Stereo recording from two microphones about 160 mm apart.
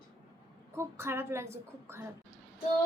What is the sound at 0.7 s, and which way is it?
A woman's voice, 15° right (ahead or behind).